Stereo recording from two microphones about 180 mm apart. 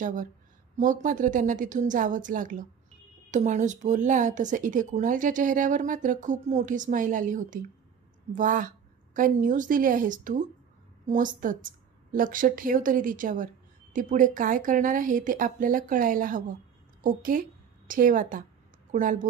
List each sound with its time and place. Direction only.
0.0 s a woman's voice: 45° right (ahead or behind)